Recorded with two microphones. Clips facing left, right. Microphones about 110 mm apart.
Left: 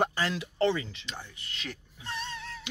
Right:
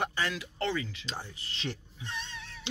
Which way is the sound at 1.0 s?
35° right (ahead or behind).